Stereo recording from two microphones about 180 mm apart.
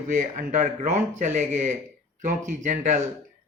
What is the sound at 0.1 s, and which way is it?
Speech, 45° right (ahead or behind).